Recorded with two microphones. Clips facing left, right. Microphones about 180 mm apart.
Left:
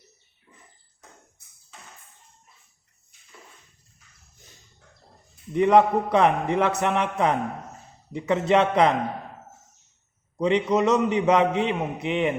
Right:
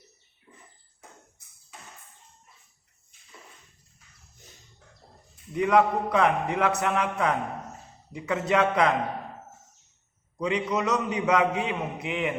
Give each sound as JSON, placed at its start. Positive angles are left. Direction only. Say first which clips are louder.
{"t": 5.5, "sound": "a man's voice", "louder": "left 4 dB", "side_deg": 30}
{"t": 10.3, "sound": "a man's voice", "louder": "left 6 dB", "side_deg": 30}